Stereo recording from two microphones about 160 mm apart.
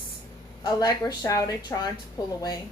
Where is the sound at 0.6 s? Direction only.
25° left (ahead or behind).